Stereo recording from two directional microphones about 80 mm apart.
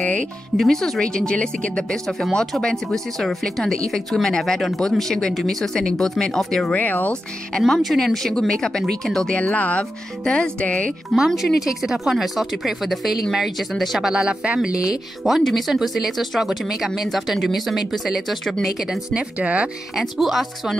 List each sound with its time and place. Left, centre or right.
0.6 s speech: centre
6.7 s speech: left
7.5 s speech: centre
9.4 s speech: centre
11.1 s speech: centre
19.3 s speech: centre
20.0 s speech: centre